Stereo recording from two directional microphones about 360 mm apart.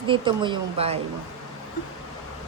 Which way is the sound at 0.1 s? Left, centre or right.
Centre.